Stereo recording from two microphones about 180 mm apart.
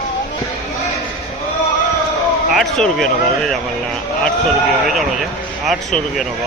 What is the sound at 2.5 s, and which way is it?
Speech, centre (ahead or behind).